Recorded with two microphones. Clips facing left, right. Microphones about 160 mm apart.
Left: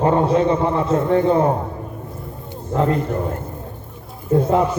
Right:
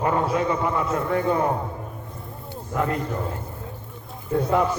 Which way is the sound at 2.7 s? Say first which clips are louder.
Left 6 dB; 25° left (ahead or behind).